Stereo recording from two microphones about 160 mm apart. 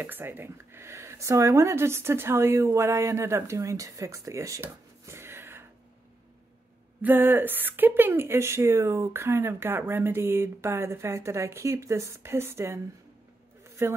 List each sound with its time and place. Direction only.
0.0 s speech: 15° right (ahead or behind)
7.0 s speech: 10° right (ahead or behind)